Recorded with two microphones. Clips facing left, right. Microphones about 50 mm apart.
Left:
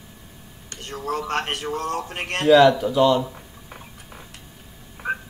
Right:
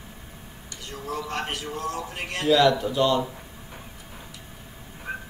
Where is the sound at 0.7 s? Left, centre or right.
Left.